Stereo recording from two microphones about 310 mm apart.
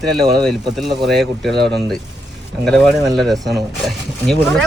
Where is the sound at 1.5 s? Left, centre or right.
Right.